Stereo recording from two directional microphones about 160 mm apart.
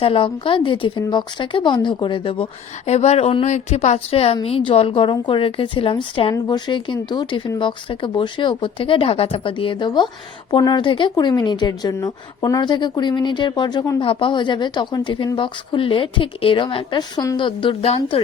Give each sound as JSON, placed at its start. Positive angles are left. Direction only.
{"t": 0.0, "sound": "speech", "side_deg": 35}